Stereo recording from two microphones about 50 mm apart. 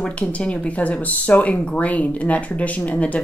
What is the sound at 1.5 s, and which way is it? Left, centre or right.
Speech, centre.